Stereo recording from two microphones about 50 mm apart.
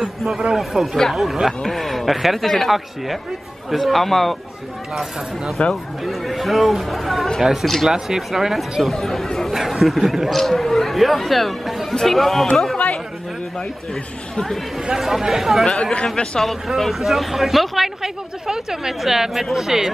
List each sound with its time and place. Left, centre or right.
0.0 s speech: centre
0.7 s speech: centre
1.1 s speech: centre
5.7 s speech: centre
7.9 s speech: centre
9.5 s speech: centre
12.7 s chatter: left
14.3 s speech: centre
14.9 s speech: centre
15.6 s speech: centre
16.3 s speech: centre